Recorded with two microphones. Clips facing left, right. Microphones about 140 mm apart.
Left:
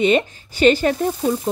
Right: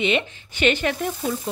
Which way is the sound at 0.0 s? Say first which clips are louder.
Left 6 dB; 40° left (ahead or behind).